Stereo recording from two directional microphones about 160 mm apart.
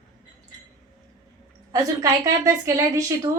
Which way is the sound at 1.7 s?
20° right (ahead or behind).